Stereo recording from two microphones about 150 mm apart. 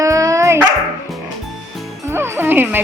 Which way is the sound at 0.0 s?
20° right (ahead or behind).